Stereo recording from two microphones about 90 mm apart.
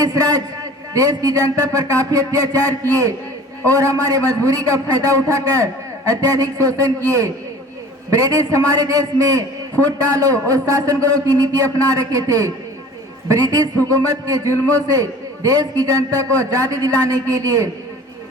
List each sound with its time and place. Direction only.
0.0 s a man's voice: 40° right (ahead or behind)
3.8 s a man's voice: 40° right (ahead or behind)